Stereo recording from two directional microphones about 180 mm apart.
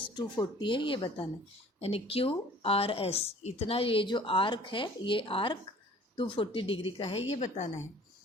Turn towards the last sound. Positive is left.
turn(degrees=40)  # may be behind; listen again after turning